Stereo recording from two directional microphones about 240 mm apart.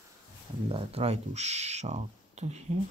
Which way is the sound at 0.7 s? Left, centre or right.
Right.